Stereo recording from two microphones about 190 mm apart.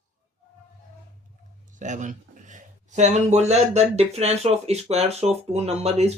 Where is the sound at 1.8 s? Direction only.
40° right (ahead or behind).